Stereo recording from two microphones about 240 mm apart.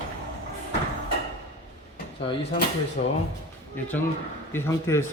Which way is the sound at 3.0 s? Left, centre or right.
Left.